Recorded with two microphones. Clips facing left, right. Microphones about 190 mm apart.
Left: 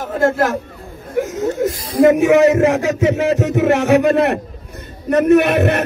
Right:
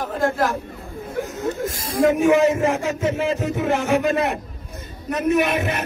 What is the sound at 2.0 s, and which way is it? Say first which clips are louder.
A man's voice: left 5 dB; 75° left (ahead or behind).